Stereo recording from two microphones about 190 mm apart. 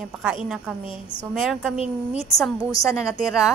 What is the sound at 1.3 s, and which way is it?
Speech, 5° right (ahead or behind).